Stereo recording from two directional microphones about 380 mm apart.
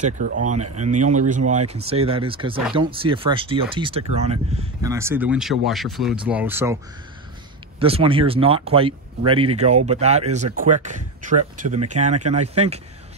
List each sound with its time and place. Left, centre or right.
0.7 s speech: centre
7.8 s speech: centre